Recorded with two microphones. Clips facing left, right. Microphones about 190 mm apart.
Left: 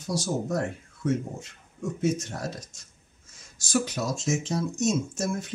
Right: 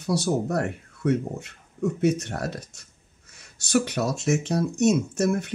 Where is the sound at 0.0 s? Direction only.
65° right (ahead or behind).